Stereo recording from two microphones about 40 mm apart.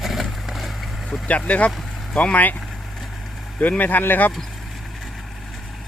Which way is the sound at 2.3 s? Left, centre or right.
Left.